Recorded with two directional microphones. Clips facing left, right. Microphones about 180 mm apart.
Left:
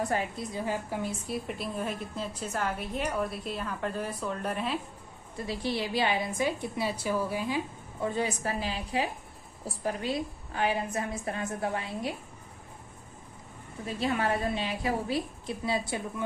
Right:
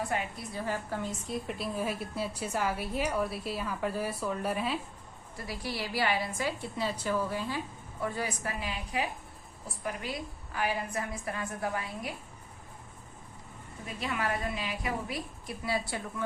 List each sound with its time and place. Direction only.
0.0 s a woman's voice: 40° left (ahead or behind)
0.3 s a woman's voice: 15° left (ahead or behind)
1.5 s a woman's voice: centre (ahead or behind)
5.4 s a woman's voice: 25° left (ahead or behind)
13.8 s a woman's voice: 30° left (ahead or behind)